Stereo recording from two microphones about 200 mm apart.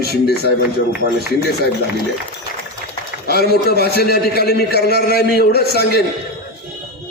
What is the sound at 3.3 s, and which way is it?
A man's voice, 50° left (ahead or behind).